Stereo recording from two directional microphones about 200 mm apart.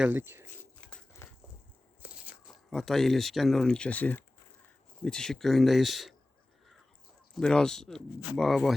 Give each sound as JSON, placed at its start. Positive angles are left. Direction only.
{"t": 0.0, "sound": "speech", "side_deg": -10}
{"t": 0.6, "sound": "a sound", "side_deg": 5}
{"t": 2.0, "sound": "speech", "side_deg": -5}
{"t": 7.3, "sound": "speech", "side_deg": 5}